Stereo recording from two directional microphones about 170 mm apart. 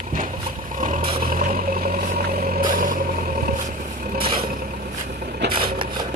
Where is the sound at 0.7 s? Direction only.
50° right (ahead or behind).